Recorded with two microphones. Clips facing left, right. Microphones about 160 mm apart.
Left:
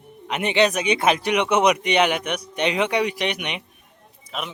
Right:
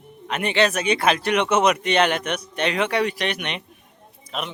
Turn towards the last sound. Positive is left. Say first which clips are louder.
# right 1 dB
turn(degrees=5)  # may be behind; listen again after turning